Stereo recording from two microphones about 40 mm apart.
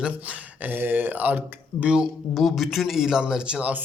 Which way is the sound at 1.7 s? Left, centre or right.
Right.